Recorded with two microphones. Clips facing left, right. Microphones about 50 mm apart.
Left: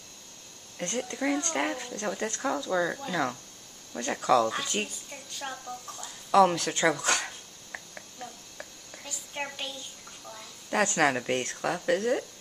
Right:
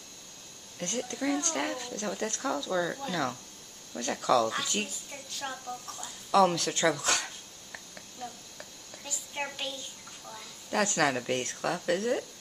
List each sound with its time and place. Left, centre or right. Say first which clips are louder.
0.7 s a woman's voice: left 2 dB; centre
4.5 s a woman's voice: left 1 dB; centre
6.3 s a woman's voice: left 2 dB; centre
7.0 s a sound: left 2 dB; centre
9.0 s a sound: even; centre
11.0 s a woman's voice: left 2 dB; centre